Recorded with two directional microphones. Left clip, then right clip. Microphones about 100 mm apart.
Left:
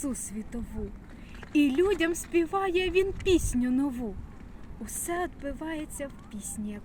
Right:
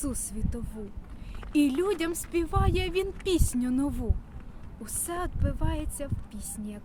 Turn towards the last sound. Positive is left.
turn(degrees=-40)  # may be behind; listen again after turning